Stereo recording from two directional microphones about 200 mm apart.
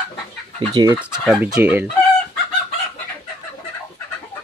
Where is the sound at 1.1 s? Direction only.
5° left (ahead or behind).